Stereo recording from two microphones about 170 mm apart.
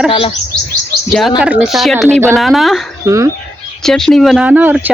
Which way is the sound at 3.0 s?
15° right (ahead or behind).